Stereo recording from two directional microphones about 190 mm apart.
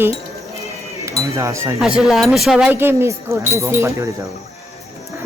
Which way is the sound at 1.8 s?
Centre (ahead or behind).